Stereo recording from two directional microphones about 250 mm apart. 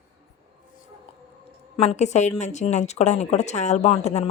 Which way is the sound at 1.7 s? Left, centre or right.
Left.